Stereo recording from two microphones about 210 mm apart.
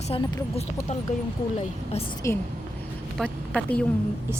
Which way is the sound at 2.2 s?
10° left (ahead or behind).